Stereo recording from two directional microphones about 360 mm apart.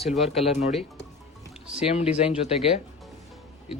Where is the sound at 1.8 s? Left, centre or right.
Centre.